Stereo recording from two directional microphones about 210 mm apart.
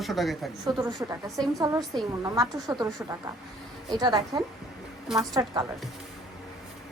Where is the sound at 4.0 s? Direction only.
20° right (ahead or behind).